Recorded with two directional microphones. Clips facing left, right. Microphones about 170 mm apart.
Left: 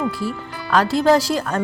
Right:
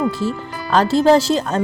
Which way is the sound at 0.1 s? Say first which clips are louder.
Right 4 dB; 25° right (ahead or behind).